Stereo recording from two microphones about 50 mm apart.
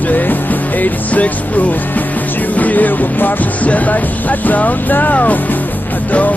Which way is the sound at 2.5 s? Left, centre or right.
Left.